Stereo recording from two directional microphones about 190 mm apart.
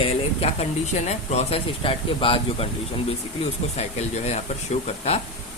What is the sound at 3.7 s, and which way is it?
Speech, 35° left (ahead or behind).